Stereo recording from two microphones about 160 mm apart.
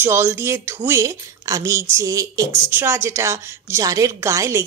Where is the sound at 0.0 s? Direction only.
15° right (ahead or behind).